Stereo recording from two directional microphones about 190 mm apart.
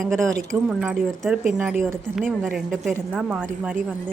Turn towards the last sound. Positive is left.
turn(degrees=-10)  # may be behind; listen again after turning